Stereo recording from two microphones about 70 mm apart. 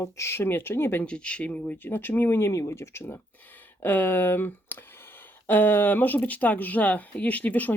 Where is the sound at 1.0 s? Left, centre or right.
Centre.